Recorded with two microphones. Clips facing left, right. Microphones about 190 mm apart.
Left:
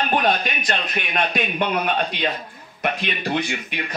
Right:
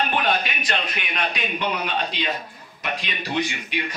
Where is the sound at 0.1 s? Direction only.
45° left (ahead or behind).